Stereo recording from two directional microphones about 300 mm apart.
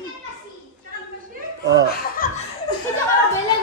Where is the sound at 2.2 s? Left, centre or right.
Left.